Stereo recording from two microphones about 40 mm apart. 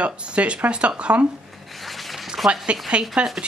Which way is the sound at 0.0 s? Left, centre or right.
Right.